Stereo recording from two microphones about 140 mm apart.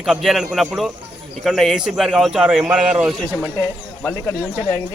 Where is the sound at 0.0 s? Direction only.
Centre (ahead or behind).